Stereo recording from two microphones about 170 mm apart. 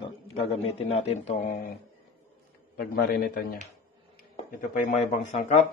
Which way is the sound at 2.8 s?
60° left (ahead or behind).